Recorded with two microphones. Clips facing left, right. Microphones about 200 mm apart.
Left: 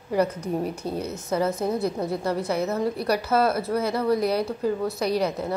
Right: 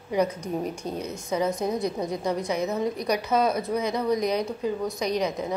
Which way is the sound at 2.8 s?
5° left (ahead or behind).